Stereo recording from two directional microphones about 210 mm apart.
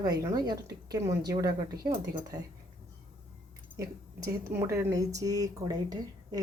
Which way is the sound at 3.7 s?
15° right (ahead or behind).